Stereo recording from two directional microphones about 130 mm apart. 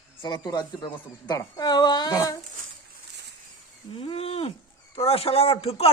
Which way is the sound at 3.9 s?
45° left (ahead or behind).